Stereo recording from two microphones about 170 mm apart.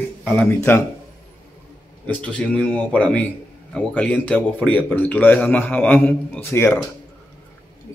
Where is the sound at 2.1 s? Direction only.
5° left (ahead or behind).